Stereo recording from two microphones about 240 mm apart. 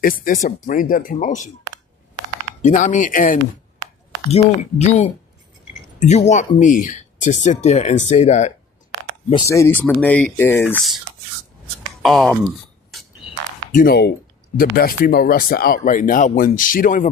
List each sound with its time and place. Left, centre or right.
0.0 s speech: left
2.6 s speech: left
4.8 s speech: left
9.3 s speech: centre
12.0 s speech: centre
13.7 s speech: left